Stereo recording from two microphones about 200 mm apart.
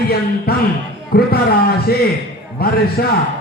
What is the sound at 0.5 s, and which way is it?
Speech, 50° left (ahead or behind).